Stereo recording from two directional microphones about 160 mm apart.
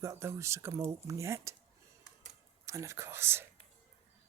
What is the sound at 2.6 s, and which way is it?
Speech, 20° right (ahead or behind).